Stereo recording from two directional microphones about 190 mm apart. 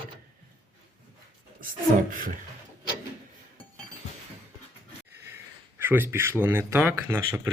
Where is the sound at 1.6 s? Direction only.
45° right (ahead or behind).